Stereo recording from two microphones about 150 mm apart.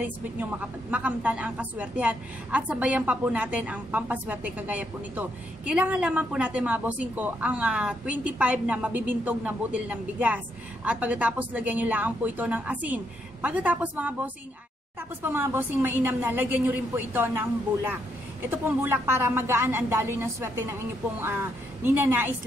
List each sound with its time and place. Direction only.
0.0 s a woman's voice: 10° right (ahead or behind)